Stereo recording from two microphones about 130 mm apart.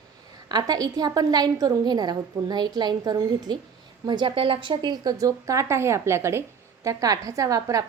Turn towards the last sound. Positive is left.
turn(degrees=-25)  # may be behind; listen again after turning